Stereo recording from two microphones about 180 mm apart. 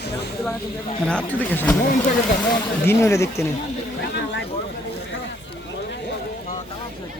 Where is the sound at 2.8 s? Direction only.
15° left (ahead or behind).